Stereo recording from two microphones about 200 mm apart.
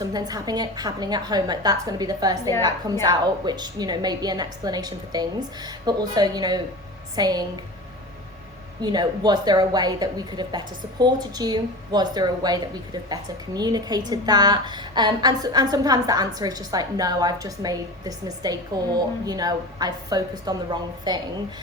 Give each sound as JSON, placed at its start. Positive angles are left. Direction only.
{"t": 0.0, "sound": "a woman's voice", "side_deg": -20}
{"t": 8.8, "sound": "a woman's voice", "side_deg": -20}